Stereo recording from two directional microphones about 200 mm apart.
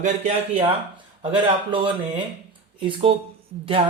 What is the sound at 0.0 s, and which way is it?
Speech, 35° right (ahead or behind).